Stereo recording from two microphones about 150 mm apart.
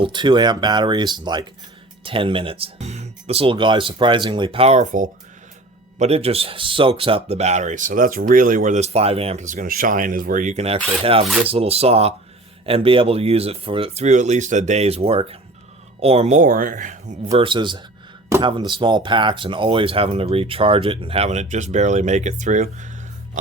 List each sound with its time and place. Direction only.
0.0 s speech: 30° right (ahead or behind); by 5.1 s 60° right (ahead or behind)
6.0 s speech: 40° right (ahead or behind); by 17.2 s 60° right (ahead or behind)
17.3 s speech: 35° right (ahead or behind); by 22.9 s 55° right (ahead or behind)